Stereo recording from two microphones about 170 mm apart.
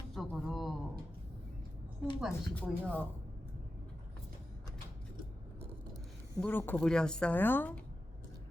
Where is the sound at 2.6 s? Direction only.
10° left (ahead or behind).